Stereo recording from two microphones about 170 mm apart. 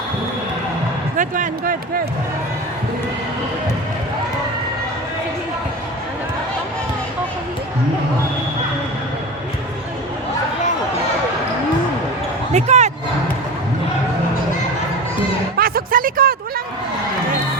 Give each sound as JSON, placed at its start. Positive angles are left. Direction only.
{"t": 1.1, "sound": "speech", "side_deg": -50}
{"t": 12.5, "sound": "basketball bounce", "side_deg": -40}
{"t": 15.5, "sound": "a sound", "side_deg": -60}